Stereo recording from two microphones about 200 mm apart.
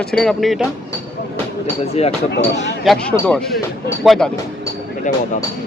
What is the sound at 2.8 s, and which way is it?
Speech, 5° left (ahead or behind).